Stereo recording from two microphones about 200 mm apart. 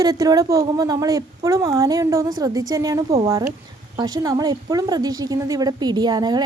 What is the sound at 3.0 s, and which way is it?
Speech, 30° right (ahead or behind).